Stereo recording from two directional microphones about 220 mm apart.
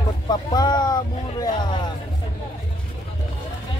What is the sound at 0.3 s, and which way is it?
Speech, 20° left (ahead or behind).